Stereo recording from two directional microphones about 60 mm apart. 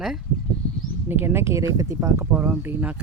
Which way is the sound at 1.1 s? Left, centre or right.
Right.